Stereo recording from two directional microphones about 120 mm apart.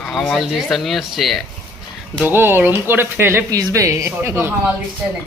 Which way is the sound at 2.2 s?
20° right (ahead or behind).